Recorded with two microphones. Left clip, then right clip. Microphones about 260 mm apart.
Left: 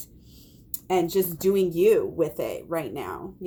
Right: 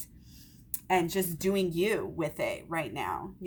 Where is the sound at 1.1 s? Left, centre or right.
Right.